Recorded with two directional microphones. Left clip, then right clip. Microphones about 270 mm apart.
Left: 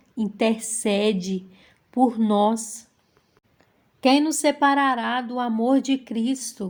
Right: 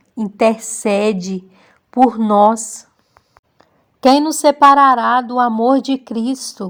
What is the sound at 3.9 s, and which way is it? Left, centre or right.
A woman's voice, right.